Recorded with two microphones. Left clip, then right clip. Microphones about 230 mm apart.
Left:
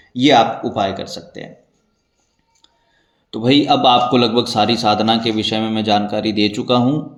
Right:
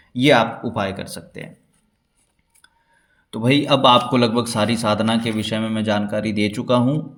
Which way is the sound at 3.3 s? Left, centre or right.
Right.